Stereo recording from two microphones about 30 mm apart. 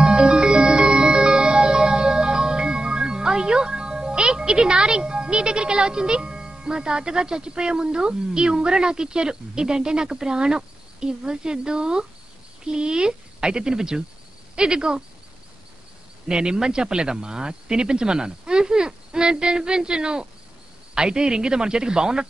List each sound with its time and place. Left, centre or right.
0.0 s music: right
12.6 s speech: right
16.3 s speech: right